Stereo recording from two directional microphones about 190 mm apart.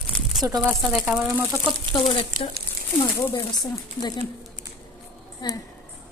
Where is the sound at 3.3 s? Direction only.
20° left (ahead or behind).